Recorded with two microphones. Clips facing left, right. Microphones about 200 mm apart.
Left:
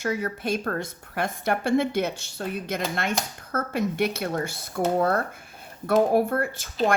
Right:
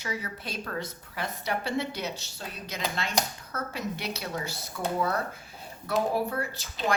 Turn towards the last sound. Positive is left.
turn(degrees=50)  # may be behind; listen again after turning